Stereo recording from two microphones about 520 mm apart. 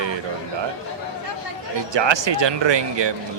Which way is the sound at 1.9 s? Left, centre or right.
Right.